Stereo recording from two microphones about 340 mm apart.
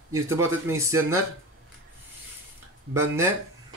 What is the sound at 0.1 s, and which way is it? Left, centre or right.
Speech, centre.